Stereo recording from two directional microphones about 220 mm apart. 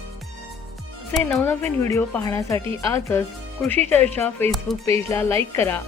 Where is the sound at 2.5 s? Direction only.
25° right (ahead or behind).